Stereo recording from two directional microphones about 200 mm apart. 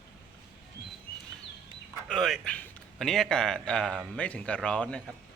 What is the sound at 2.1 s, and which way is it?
A man's voice, centre (ahead or behind).